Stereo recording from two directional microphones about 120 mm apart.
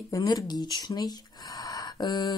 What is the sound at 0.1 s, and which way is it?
Speech, 30° left (ahead or behind).